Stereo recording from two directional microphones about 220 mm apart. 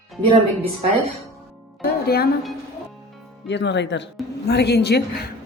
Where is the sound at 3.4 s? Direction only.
55° left (ahead or behind).